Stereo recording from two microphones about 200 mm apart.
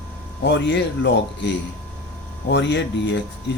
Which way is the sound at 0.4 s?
60° left (ahead or behind).